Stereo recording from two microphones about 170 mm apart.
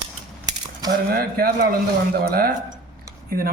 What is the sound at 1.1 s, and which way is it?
Speech, 60° right (ahead or behind).